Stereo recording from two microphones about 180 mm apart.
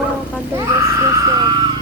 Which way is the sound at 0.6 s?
15° right (ahead or behind).